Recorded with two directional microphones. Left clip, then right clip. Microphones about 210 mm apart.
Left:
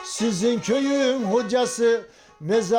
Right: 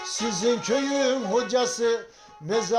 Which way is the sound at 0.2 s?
55° left (ahead or behind).